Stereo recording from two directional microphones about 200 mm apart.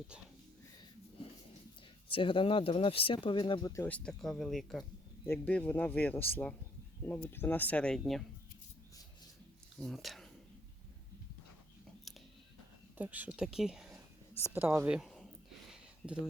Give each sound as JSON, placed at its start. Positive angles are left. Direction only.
{"t": 2.0, "sound": "a man's voice", "side_deg": 25}
{"t": 9.8, "sound": "speech", "side_deg": 0}
{"t": 13.0, "sound": "speech", "side_deg": -10}